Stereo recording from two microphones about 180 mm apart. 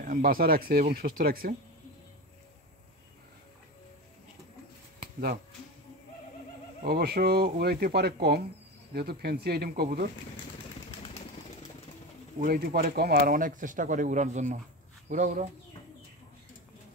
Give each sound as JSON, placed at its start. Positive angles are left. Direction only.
{"t": 0.0, "sound": "speech", "side_deg": -50}
{"t": 6.8, "sound": "speech", "side_deg": -60}
{"t": 12.4, "sound": "speech", "side_deg": -55}